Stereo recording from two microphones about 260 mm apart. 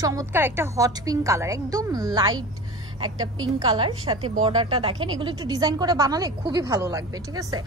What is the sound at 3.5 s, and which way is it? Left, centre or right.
A woman's voice, centre.